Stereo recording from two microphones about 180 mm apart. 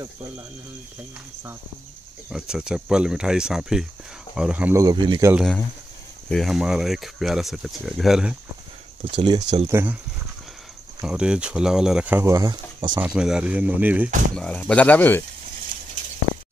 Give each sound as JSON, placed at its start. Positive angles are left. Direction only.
{"t": 2.2, "sound": "speech", "side_deg": -5}
{"t": 6.3, "sound": "speech", "side_deg": 0}
{"t": 9.1, "sound": "speech", "side_deg": -25}
{"t": 11.1, "sound": "speech", "side_deg": -5}
{"t": 13.0, "sound": "speech", "side_deg": -5}
{"t": 14.3, "sound": "speech", "side_deg": 5}